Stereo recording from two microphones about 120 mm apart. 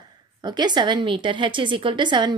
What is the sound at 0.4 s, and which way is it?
A woman's voice, 40° right (ahead or behind).